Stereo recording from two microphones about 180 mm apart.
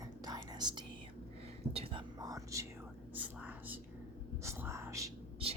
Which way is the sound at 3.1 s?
10° right (ahead or behind).